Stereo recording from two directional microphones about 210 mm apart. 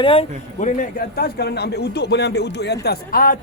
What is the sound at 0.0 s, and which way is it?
A man's voice, 25° left (ahead or behind).